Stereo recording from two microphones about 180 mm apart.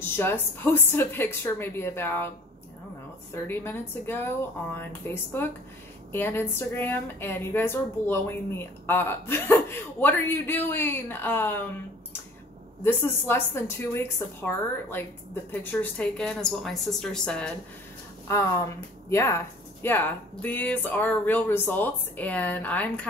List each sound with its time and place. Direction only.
0.1 s a woman's voice: 10° left (ahead or behind)
3.4 s a woman's voice: 10° left (ahead or behind)
12.8 s a woman's voice: 15° left (ahead or behind)
18.3 s a woman's voice: 15° left (ahead or behind)